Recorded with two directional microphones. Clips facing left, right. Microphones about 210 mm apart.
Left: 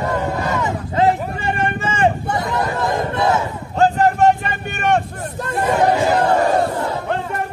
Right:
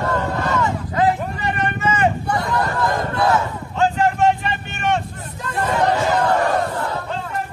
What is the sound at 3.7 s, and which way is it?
Vehicle, 40° left (ahead or behind).